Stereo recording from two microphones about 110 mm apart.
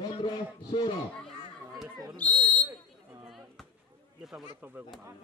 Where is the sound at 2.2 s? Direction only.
15° left (ahead or behind).